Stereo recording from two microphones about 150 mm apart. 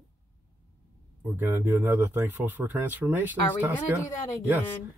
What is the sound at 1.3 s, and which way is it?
Speech, 15° right (ahead or behind).